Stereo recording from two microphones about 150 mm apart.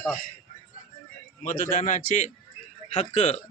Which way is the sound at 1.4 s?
60° left (ahead or behind).